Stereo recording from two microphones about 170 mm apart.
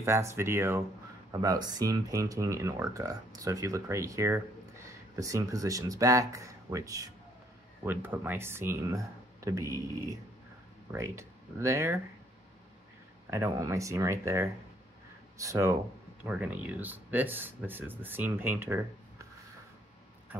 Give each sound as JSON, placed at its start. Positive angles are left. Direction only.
{"t": 0.0, "sound": "speech", "side_deg": -15}
{"t": 10.9, "sound": "speech", "side_deg": -15}
{"t": 13.3, "sound": "speech", "side_deg": -15}